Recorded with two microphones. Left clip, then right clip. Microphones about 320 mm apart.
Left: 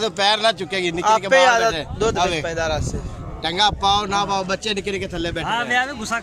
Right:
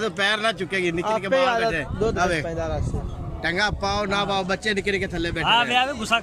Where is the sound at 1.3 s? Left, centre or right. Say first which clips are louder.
Left 5 dB; left.